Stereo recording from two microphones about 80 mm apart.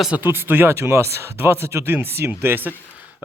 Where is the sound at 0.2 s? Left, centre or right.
Right.